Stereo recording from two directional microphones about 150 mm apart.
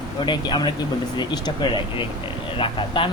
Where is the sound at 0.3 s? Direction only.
30° left (ahead or behind).